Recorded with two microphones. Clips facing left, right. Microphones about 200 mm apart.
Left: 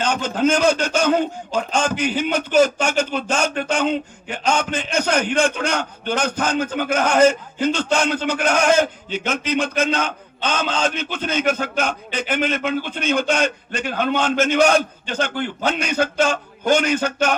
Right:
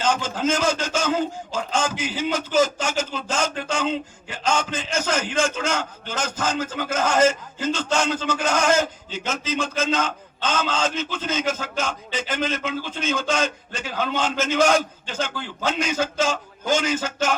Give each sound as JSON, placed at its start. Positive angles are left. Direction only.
{"t": 0.0, "sound": "a man's voice", "side_deg": 65}